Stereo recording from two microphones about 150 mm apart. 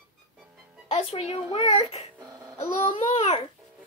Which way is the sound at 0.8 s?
40° left (ahead or behind).